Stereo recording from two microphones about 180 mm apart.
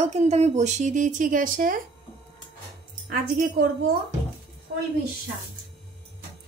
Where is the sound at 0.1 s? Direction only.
35° right (ahead or behind).